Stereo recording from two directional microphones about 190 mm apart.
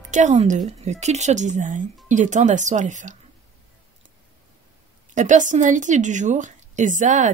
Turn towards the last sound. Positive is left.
turn(degrees=-40)  # may be behind; listen again after turning